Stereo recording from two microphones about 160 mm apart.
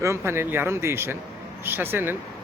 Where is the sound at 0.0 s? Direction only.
15° right (ahead or behind).